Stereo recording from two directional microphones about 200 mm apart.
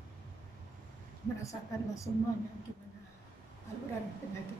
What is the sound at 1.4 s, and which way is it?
Speech, 15° left (ahead or behind).